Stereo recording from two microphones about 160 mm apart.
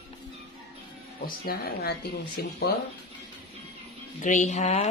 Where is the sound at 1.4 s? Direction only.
80° left.